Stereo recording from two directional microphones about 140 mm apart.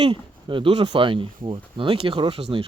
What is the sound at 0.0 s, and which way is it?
Speech, 35° right (ahead or behind).